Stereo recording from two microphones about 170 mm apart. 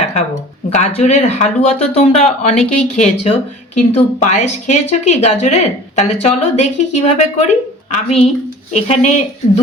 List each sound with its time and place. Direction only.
0.7 s a woman's voice: 40° left (ahead or behind)